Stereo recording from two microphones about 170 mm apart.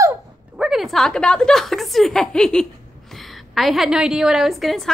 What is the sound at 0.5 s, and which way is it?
A woman's voice, 5° right (ahead or behind).